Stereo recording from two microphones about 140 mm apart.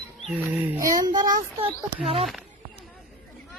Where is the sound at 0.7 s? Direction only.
25° right (ahead or behind); by 2.1 s 40° right (ahead or behind).